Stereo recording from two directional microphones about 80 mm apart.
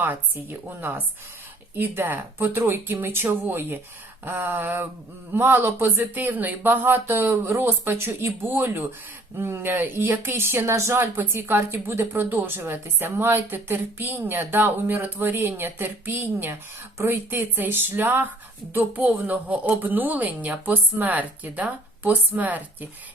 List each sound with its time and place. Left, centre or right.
0.0 s speech: right